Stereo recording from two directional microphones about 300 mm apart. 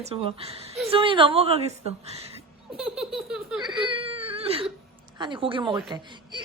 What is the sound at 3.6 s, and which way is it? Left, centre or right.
Baby cry, centre.